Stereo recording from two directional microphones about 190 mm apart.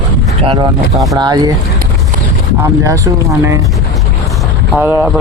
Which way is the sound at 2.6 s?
15° right (ahead or behind).